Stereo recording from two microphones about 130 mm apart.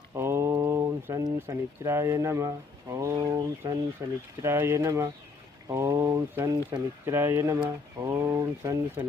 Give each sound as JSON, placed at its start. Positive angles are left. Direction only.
{"t": 0.1, "sound": "speech", "side_deg": -20}